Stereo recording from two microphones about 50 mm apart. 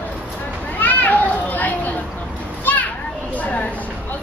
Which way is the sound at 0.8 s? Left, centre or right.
Left.